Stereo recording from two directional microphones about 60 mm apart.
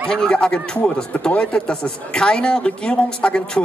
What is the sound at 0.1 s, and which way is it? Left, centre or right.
Speech, centre.